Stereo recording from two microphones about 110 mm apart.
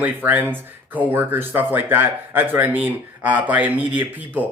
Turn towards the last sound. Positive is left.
turn(degrees=-15)  # may be behind; listen again after turning